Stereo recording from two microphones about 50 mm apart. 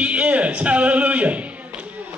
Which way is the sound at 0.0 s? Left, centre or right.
Right.